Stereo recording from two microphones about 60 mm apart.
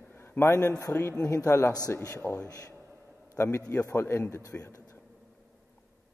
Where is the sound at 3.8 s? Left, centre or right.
Left.